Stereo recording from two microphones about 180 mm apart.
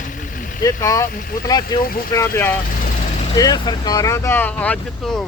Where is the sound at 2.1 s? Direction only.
15° left (ahead or behind).